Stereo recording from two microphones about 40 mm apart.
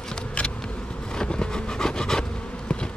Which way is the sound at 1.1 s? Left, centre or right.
Left.